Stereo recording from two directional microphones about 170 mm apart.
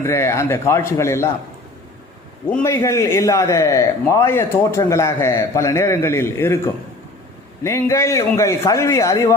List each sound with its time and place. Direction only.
0.0 s a man's voice: 15° left (ahead or behind)
2.6 s a man's voice: 15° left (ahead or behind)
7.6 s a man's voice: 15° left (ahead or behind)